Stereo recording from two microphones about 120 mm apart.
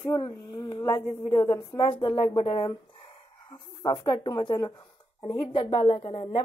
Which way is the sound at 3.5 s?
40° left (ahead or behind).